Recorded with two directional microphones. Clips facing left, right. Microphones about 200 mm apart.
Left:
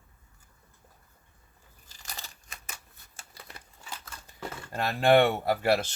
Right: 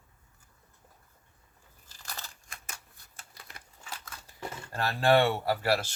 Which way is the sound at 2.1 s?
20° left (ahead or behind).